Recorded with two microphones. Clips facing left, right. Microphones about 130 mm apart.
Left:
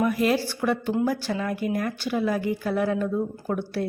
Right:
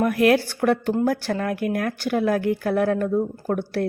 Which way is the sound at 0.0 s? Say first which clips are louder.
Right 4 dB; 65° right (ahead or behind).